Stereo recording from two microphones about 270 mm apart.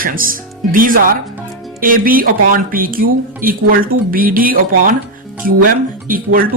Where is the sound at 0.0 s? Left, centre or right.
Right.